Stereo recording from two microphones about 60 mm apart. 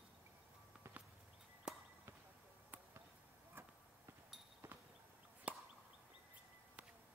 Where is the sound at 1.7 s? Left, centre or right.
Centre.